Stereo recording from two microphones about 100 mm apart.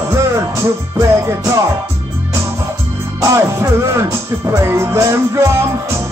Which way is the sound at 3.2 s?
25° right (ahead or behind).